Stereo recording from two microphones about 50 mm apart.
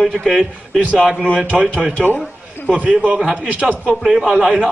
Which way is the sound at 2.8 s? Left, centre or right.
Right.